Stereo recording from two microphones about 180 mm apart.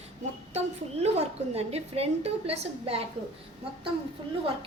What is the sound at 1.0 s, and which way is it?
A woman's voice, 35° right (ahead or behind).